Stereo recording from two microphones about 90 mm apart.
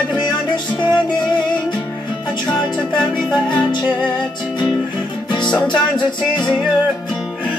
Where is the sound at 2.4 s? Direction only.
55° left (ahead or behind).